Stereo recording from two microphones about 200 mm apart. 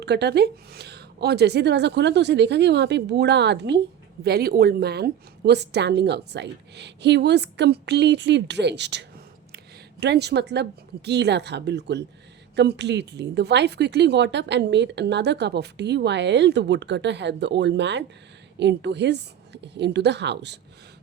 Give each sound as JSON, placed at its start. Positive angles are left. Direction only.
{"t": 0.0, "sound": "a woman's voice", "side_deg": -55}